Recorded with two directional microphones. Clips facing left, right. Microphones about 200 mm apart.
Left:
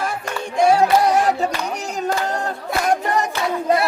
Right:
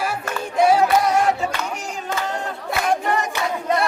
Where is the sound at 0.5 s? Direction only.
5° right (ahead or behind).